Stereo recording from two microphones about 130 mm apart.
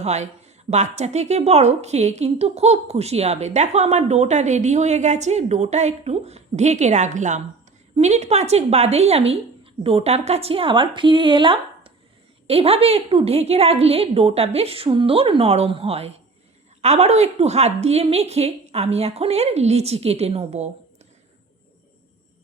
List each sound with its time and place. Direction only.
0.0 s a woman's voice: 60° right (ahead or behind)
7.9 s a woman's voice: 60° right (ahead or behind)